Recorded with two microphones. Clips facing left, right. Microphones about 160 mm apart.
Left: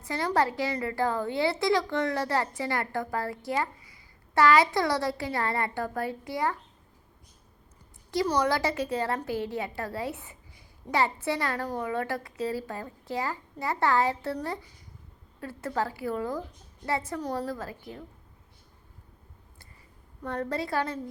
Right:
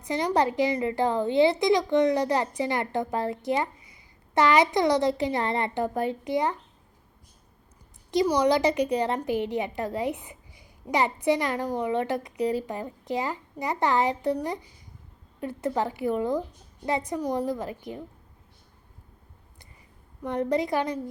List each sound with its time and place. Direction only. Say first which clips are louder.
0.0 s a woman's voice: right 3 dB; 20° right (ahead or behind)
8.1 s a woman's voice: right 4 dB; 15° right (ahead or behind)
20.2 s a child's voice: right 6 dB; 15° right (ahead or behind)